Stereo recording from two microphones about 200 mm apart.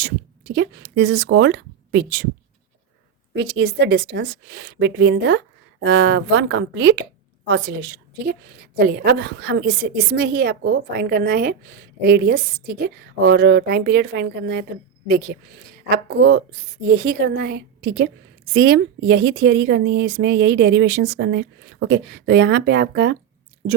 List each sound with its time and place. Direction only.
0.0 s speech: 55° right (ahead or behind)
3.3 s a woman's voice: 55° right (ahead or behind)